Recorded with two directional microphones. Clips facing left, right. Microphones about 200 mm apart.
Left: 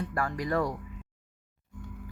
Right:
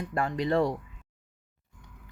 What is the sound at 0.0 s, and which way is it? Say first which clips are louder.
Speech: right 2 dB; 20° right (ahead or behind).